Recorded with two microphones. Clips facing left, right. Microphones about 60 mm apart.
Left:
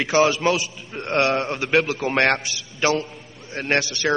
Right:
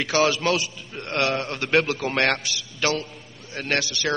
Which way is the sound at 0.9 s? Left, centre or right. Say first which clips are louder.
Left 4 dB; left.